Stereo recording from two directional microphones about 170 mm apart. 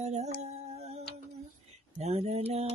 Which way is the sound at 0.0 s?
40° right (ahead or behind).